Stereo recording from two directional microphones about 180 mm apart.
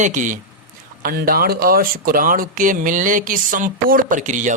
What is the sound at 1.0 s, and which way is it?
A man's voice, 55° right (ahead or behind).